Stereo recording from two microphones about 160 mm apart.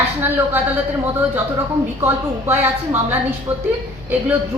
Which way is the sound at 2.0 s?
15° right (ahead or behind).